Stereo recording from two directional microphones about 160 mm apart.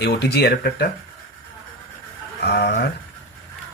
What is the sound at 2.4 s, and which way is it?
Speech, 90° left.